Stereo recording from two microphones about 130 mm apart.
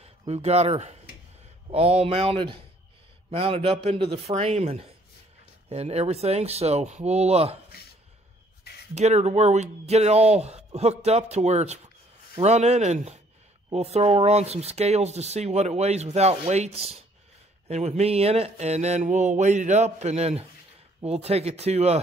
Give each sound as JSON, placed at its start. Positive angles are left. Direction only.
{"t": 0.3, "sound": "speech", "side_deg": -55}
{"t": 8.9, "sound": "speech", "side_deg": -60}